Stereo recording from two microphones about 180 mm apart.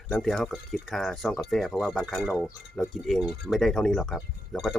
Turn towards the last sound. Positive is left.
turn(degrees=0)  # may be behind; listen again after turning